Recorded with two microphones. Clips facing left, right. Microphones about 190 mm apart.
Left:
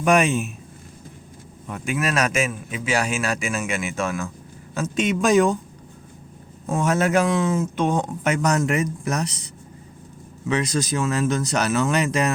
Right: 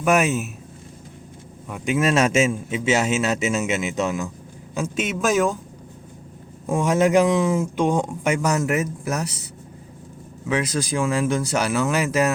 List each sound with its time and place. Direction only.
0.0 s a man's voice: 5° right (ahead or behind)
1.8 s a man's voice: 25° right (ahead or behind); by 5.5 s centre (ahead or behind)
6.7 s speech: 15° right (ahead or behind)
10.5 s speech: 10° right (ahead or behind)